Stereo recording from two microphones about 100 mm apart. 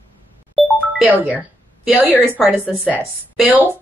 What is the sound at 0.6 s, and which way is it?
Music, centre (ahead or behind).